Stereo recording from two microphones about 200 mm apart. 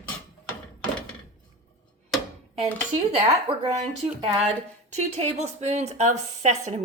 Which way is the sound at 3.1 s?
30° right (ahead or behind).